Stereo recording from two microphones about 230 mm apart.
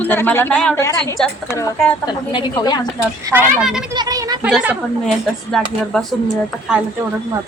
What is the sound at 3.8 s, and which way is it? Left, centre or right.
Speech, centre.